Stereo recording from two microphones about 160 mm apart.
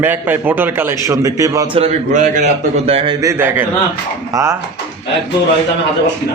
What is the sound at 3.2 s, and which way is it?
Speech, 15° right (ahead or behind).